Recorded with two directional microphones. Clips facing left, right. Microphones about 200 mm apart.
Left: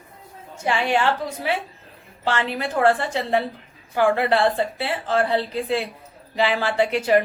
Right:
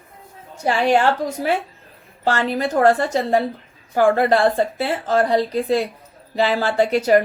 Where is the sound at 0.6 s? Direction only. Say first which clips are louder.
Right 4 dB; 40° right (ahead or behind).